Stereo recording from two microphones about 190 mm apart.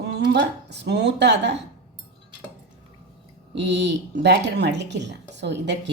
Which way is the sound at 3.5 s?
65° right (ahead or behind).